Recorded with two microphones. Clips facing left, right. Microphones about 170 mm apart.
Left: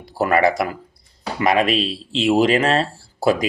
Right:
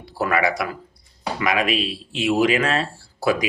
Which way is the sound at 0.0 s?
25° left (ahead or behind).